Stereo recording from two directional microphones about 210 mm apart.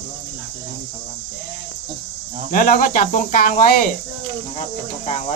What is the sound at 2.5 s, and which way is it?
Speech, 40° left (ahead or behind).